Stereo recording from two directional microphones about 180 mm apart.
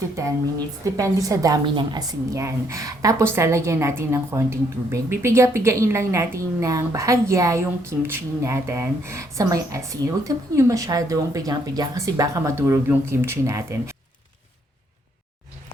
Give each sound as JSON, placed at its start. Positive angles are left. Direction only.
{"t": 0.9, "sound": "a woman's voice", "side_deg": -15}